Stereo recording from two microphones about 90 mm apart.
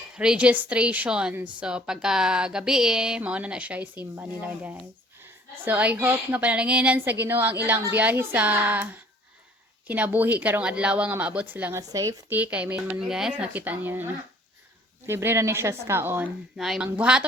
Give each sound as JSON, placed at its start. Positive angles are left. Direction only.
{"t": 0.2, "sound": "a woman's voice", "side_deg": -10}
{"t": 11.7, "sound": "speech", "side_deg": -40}
{"t": 12.3, "sound": "a woman's voice", "side_deg": -15}
{"t": 13.3, "sound": "a woman's voice", "side_deg": -15}
{"t": 16.6, "sound": "a woman's voice", "side_deg": -5}